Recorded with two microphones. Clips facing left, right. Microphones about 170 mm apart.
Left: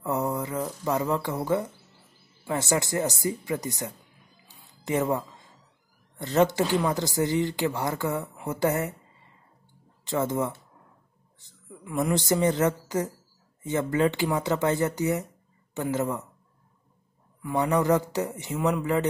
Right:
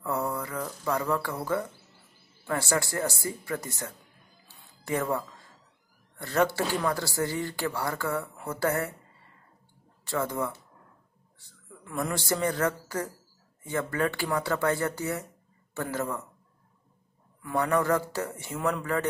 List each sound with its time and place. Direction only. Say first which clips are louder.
0.0 s speech: left 3 dB; 20° left (ahead or behind)
4.5 s music: left 2 dB; 20° left (ahead or behind)
6.1 s speech: left 4 dB; 20° left (ahead or behind)
10.0 s speech: left 3 dB; 20° left (ahead or behind)
12.0 s speech: left 5 dB; 20° left (ahead or behind)
17.6 s a sound: left 2 dB; 20° left (ahead or behind)
18.7 s speech: left 3 dB; 20° left (ahead or behind)